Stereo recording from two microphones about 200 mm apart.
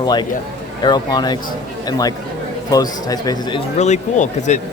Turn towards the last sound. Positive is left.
turn(degrees=35)  # may be behind; listen again after turning